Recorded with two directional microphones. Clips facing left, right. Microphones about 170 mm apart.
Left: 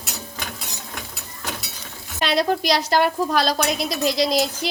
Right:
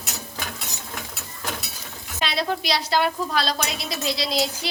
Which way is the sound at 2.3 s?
45° left (ahead or behind).